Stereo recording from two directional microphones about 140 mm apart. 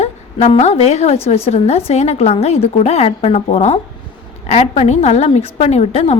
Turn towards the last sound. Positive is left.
turn(degrees=45)  # may be behind; listen again after turning